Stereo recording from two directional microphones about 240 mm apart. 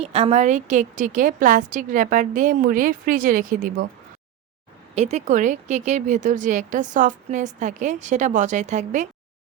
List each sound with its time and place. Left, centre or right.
0.0 s speech: right
4.9 s speech: right